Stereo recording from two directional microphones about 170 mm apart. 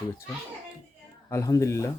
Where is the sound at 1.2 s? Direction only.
20° left (ahead or behind).